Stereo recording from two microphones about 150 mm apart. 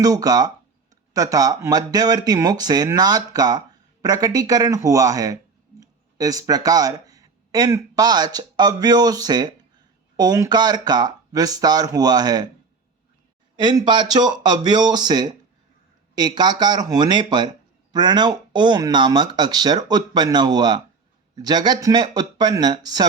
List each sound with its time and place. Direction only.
0.0 s speech: 25° right (ahead or behind)
13.6 s speech: 30° right (ahead or behind)